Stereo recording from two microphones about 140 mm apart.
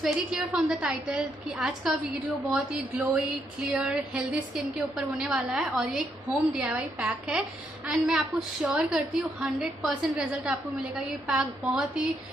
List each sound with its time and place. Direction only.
0.0 s a woman's voice: 5° right (ahead or behind)